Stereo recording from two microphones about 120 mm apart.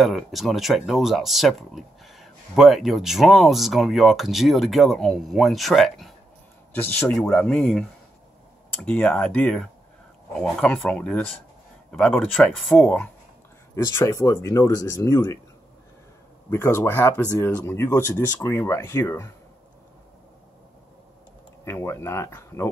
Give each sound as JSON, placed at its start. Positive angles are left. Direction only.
{"t": 0.0, "sound": "speech", "side_deg": 0}
{"t": 6.7, "sound": "speech", "side_deg": 15}
{"t": 8.8, "sound": "speech", "side_deg": 10}
{"t": 12.4, "sound": "speech", "side_deg": 0}
{"t": 13.8, "sound": "speech", "side_deg": 25}
{"t": 16.4, "sound": "speech", "side_deg": 20}
{"t": 21.6, "sound": "speech", "side_deg": 20}